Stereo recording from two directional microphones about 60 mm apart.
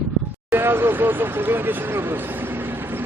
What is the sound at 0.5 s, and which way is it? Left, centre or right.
Speech, right.